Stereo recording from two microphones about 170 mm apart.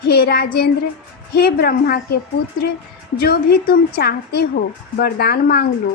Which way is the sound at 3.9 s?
65° left (ahead or behind).